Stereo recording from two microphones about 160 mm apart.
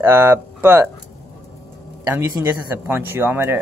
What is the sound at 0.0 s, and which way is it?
Speech, 15° right (ahead or behind).